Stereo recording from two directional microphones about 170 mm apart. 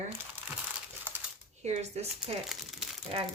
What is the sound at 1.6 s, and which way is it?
Speech, 40° right (ahead or behind).